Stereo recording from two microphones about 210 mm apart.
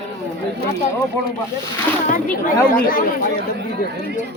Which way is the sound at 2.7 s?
45° left (ahead or behind).